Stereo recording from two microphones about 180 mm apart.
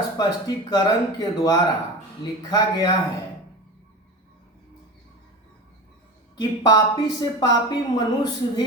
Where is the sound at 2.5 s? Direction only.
20° left (ahead or behind).